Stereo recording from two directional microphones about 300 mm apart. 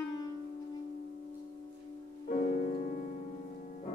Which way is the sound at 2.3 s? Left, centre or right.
Left.